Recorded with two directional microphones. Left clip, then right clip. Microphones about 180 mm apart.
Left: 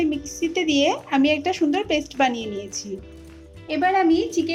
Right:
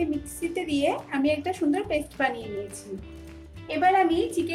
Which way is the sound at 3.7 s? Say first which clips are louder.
Left 1 dB; 40° left (ahead or behind).